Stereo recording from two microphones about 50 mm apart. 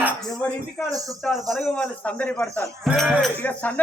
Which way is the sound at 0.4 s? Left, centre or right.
Left.